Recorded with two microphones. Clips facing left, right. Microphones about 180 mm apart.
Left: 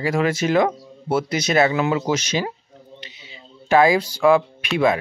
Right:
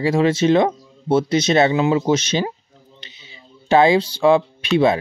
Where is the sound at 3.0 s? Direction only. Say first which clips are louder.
Left 3 dB; 25° right (ahead or behind).